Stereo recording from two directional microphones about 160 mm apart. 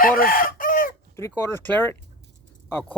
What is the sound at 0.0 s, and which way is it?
Chicken, 65° left (ahead or behind).